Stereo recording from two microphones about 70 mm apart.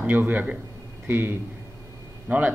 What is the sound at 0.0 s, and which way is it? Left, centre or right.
A man's voice, right.